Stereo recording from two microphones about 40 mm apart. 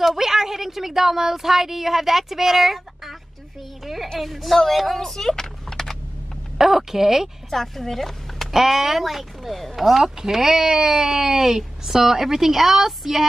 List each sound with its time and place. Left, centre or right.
0.0 s speech: centre
3.8 s a sound: centre
4.1 s speech: centre
6.6 s speech: centre
7.5 s a woman's voice: centre
8.5 s speech: centre